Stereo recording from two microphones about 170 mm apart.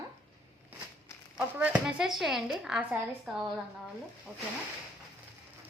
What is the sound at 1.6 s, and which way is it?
Speech, 5° right (ahead or behind).